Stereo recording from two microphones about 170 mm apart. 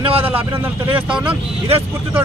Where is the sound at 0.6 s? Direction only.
10° right (ahead or behind).